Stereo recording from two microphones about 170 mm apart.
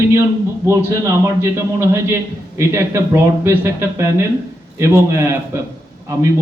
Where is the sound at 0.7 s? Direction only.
15° right (ahead or behind).